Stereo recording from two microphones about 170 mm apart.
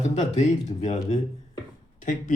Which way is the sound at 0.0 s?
45° left (ahead or behind).